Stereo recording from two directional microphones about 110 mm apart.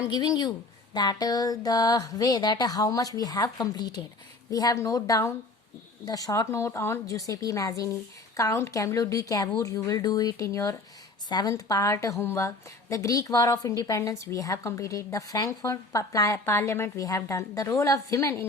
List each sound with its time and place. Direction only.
0.1 s a woman's voice: 40° left (ahead or behind)